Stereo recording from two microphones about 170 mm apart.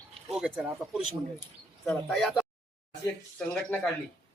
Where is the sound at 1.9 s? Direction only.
Centre (ahead or behind).